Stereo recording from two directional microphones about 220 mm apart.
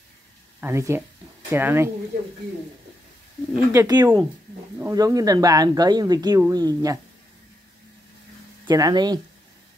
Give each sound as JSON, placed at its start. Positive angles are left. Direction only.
{"t": 0.6, "sound": "speech", "side_deg": -10}
{"t": 3.5, "sound": "speech", "side_deg": -15}
{"t": 8.6, "sound": "speech", "side_deg": -20}